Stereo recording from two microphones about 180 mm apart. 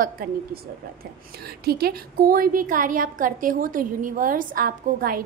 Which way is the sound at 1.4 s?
60° right (ahead or behind).